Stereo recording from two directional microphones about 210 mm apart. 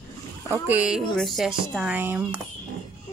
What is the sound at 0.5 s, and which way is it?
A child's voice, 10° right (ahead or behind).